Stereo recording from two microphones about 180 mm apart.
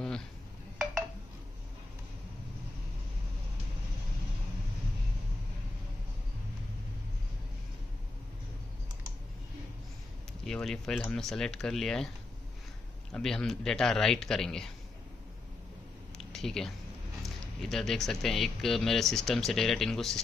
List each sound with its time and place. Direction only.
10.4 s speech: centre (ahead or behind)
13.1 s speech: 5° left (ahead or behind)
16.2 s a sound: centre (ahead or behind)
17.2 s speech: centre (ahead or behind)